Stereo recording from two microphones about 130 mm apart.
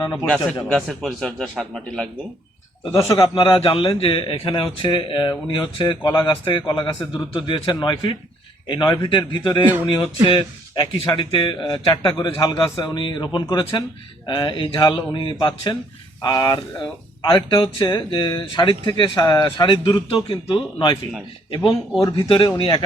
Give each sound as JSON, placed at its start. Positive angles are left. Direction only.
{"t": 0.0, "sound": "a man's voice", "side_deg": 30}
{"t": 0.6, "sound": "a man's voice", "side_deg": 0}
{"t": 3.0, "sound": "a man's voice", "side_deg": 20}
{"t": 3.3, "sound": "a man's voice", "side_deg": 40}
{"t": 10.8, "sound": "a man's voice", "side_deg": 35}